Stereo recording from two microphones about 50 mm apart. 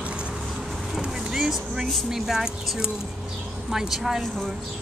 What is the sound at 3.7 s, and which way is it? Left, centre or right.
Speech, centre.